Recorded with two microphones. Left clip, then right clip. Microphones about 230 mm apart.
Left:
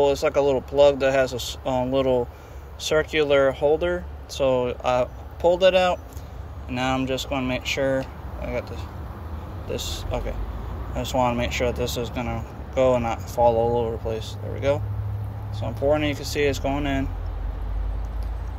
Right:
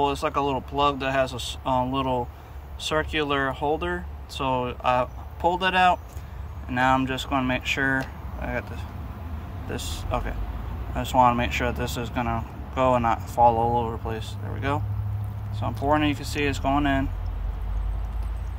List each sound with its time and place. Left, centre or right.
0.0 s speech: centre